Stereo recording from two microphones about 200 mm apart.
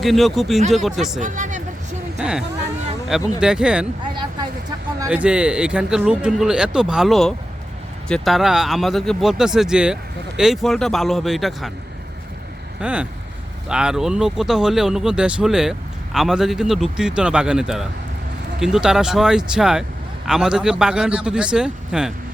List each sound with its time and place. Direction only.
0.0 s speech: centre (ahead or behind)
1.2 s vehicle: 40° right (ahead or behind)
2.1 s speech: 5° right (ahead or behind)
4.1 s a sound: 25° right (ahead or behind)
4.9 s speech: 5° right (ahead or behind)
12.8 s speech: 5° right (ahead or behind)